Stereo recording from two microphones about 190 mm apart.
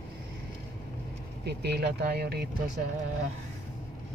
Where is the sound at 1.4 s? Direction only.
60° right (ahead or behind).